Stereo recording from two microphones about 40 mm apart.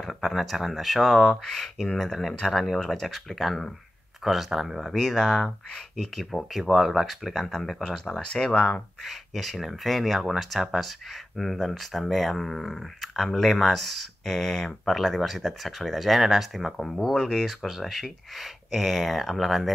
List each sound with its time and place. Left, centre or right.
0.0 s speech: centre
4.2 s speech: centre
4.9 s speech: centre
8.0 s speech: left
9.0 s speech: centre
16.7 s speech: centre